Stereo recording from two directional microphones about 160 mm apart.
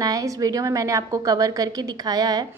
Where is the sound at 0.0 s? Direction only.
20° right (ahead or behind).